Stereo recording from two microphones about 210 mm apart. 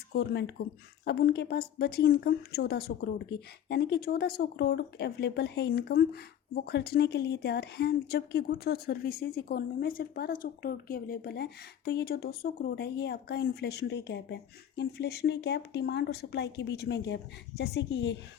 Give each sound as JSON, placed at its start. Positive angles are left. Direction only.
{"t": 0.1, "sound": "speech", "side_deg": 55}